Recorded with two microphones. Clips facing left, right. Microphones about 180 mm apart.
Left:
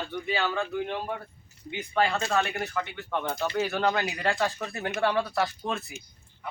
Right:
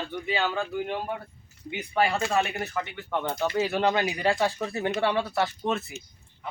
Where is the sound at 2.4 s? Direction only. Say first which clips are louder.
Right 1 dB; 5° right (ahead or behind).